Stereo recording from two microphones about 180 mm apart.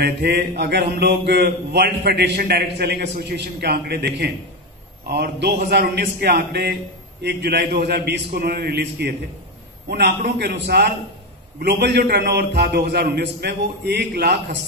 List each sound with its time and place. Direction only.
0.0 s a man's voice: 60° right (ahead or behind)